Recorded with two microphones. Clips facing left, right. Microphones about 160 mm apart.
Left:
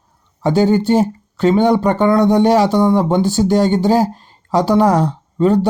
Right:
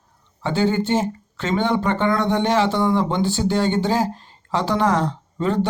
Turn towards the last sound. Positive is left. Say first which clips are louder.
# left 8 dB
turn(degrees=40)  # may be behind; listen again after turning